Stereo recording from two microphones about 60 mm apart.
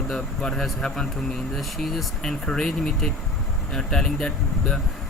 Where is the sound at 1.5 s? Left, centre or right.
Centre.